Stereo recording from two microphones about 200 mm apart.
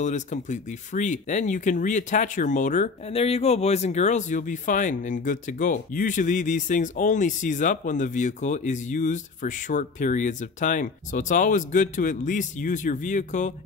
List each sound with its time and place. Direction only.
0.0 s speech: 35° left (ahead or behind)